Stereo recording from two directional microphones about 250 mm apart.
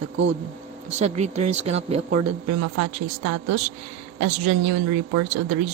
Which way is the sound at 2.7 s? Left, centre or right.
Right.